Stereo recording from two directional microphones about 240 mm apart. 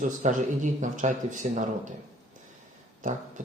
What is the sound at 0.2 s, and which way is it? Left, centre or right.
Speech, right.